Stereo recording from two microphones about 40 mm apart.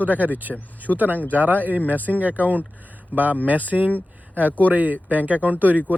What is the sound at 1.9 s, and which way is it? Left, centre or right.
Speech, right.